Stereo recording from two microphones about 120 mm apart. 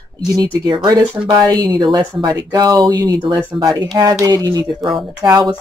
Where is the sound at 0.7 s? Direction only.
35° right (ahead or behind).